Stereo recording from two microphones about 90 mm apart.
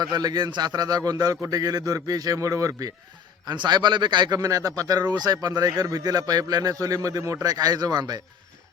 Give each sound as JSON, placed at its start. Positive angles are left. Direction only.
{"t": 0.0, "sound": "a man's voice", "side_deg": -45}
{"t": 3.4, "sound": "a man's voice", "side_deg": -55}
{"t": 4.4, "sound": "a man's voice", "side_deg": -40}